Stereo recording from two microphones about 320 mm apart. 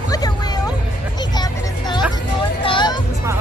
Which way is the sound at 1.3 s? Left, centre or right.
Centre.